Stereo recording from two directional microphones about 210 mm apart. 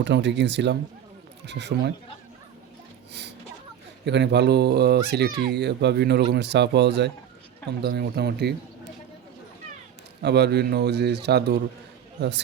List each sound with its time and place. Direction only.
0.0 s speech: 55° right (ahead or behind)
3.1 s a sound: 55° right (ahead or behind)
4.0 s speech: 55° right (ahead or behind)
10.2 s speech: 50° right (ahead or behind)